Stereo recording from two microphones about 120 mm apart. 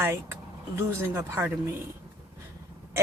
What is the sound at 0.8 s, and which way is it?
Speech, 20° right (ahead or behind).